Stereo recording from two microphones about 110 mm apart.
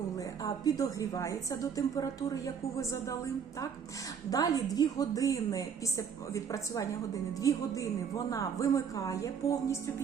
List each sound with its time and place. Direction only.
0.4 s a woman's voice: 35° left (ahead or behind)
4.3 s a woman's voice: 35° left (ahead or behind)